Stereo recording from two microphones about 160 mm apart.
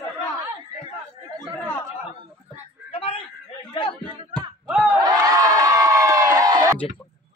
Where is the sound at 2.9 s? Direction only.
35° left (ahead or behind).